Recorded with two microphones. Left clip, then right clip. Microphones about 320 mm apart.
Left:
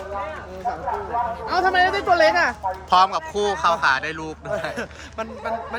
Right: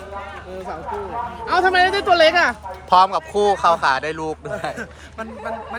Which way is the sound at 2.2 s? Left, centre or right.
Right.